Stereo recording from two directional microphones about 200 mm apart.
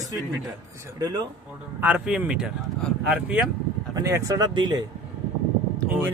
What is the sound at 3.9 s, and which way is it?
Speech, 15° right (ahead or behind).